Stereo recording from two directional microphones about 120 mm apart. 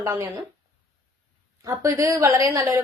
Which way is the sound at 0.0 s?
25° right (ahead or behind).